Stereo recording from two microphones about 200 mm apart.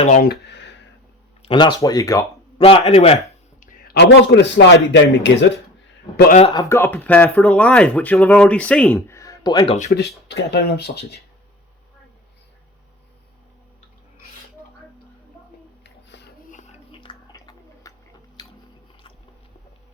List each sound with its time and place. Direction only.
0.0 s speech: 45° left (ahead or behind); by 0.8 s 60° left (ahead or behind)
1.4 s speech: 25° left (ahead or behind)
2.6 s a man's voice: 30° left (ahead or behind)
3.6 s a man's voice: 45° left (ahead or behind); by 5.5 s 60° left (ahead or behind)
6.5 s speech: 15° left (ahead or behind)
10.2 s speech: 55° left (ahead or behind)
15.8 s a sound: 60° left (ahead or behind)
17.0 s music: 20° left (ahead or behind)
18.4 s biting: 20° left (ahead or behind)